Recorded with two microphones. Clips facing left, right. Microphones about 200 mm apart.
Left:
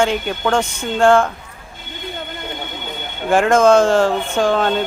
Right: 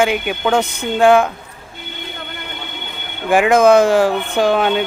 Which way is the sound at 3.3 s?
10° right (ahead or behind).